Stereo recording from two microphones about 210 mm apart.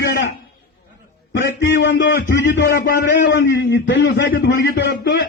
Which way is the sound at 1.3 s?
55° left (ahead or behind).